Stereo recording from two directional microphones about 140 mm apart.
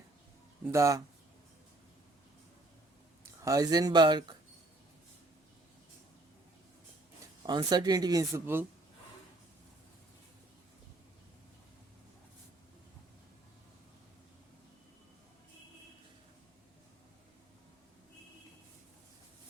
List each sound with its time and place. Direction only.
0.6 s speech: 20° right (ahead or behind)
3.4 s speech: 25° right (ahead or behind)
7.4 s speech: 30° right (ahead or behind)